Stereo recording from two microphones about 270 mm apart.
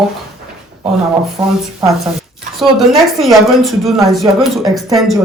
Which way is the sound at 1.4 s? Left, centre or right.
Centre.